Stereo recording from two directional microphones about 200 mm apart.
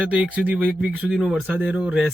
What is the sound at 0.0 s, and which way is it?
Speech, 5° right (ahead or behind).